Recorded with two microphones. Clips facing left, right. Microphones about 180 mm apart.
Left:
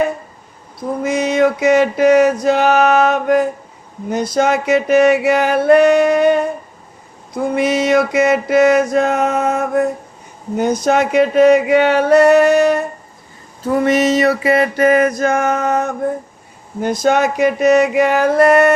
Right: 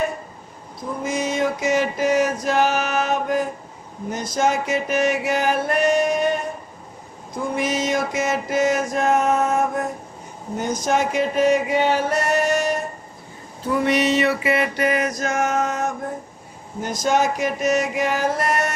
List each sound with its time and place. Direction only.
1.0 s music: 70° left (ahead or behind)
7.5 s music: 65° left (ahead or behind)
13.7 s music: 45° left (ahead or behind); by 15.9 s 60° left (ahead or behind)
16.8 s a sound: 60° left (ahead or behind)